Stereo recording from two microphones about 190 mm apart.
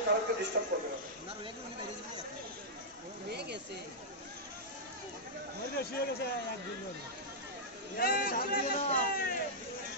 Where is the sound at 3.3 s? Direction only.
60° right (ahead or behind).